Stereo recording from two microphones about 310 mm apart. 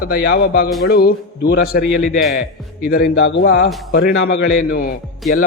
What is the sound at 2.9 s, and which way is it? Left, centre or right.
A man's voice, left.